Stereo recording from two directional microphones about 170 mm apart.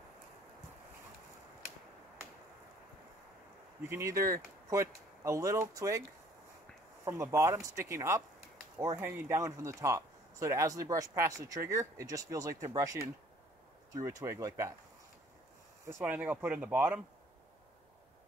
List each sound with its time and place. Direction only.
3.9 s speech: 15° right (ahead or behind)
7.1 s speech: 15° right (ahead or behind)
15.9 s speech: 10° right (ahead or behind)